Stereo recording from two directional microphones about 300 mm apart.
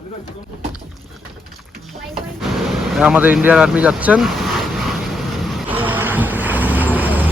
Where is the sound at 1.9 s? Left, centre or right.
Centre.